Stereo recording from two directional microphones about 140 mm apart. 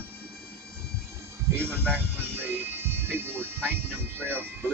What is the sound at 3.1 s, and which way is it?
Music, 15° right (ahead or behind).